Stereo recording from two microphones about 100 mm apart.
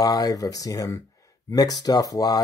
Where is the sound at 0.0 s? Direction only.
40° left (ahead or behind).